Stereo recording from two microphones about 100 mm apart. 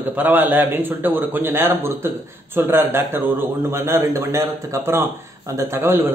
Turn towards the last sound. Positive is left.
turn(degrees=-25)  # may be behind; listen again after turning